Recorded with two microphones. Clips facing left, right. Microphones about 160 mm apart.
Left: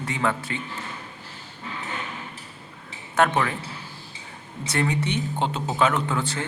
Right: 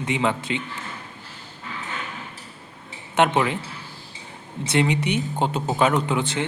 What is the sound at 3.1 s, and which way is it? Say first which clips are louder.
Speech: right 2 dB; 20° right (ahead or behind).